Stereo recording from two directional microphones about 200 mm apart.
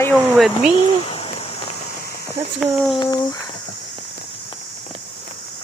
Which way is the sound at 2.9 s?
20° left (ahead or behind).